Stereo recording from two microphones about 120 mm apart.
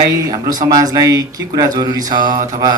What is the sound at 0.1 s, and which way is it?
Speech, 30° right (ahead or behind).